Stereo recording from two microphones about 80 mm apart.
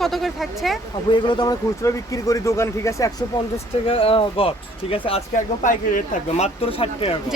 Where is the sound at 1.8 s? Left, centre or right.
Left.